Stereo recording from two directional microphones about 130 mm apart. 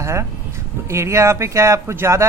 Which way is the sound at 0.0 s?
20° right (ahead or behind).